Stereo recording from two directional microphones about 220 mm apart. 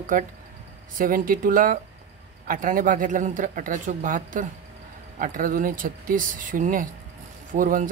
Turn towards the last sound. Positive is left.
turn(degrees=-40)  # may be behind; listen again after turning